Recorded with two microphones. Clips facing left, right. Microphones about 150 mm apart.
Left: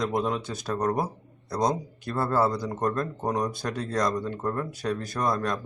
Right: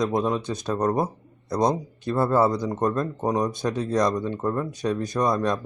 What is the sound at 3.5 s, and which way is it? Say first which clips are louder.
Speech: right 5 dB; 20° right (ahead or behind).